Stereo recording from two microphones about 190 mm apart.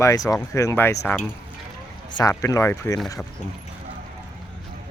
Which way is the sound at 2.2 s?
15° left (ahead or behind).